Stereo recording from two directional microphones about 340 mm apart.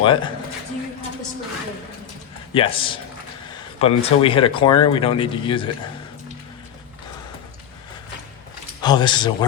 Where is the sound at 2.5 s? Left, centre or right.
Centre.